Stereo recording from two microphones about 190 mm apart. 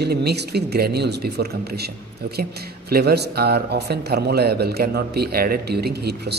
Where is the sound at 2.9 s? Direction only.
60° right (ahead or behind).